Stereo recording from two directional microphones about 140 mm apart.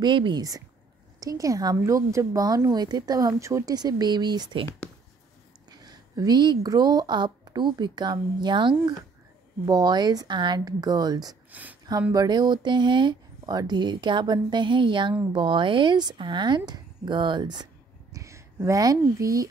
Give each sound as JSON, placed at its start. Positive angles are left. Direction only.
{"t": 0.0, "sound": "a woman's voice", "side_deg": -35}
{"t": 5.7, "sound": "a woman's voice", "side_deg": -30}